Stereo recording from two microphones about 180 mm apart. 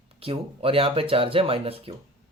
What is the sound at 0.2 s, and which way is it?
Speech, 30° right (ahead or behind).